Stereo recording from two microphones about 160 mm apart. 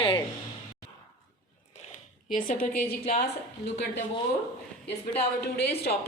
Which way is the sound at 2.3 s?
60° left (ahead or behind).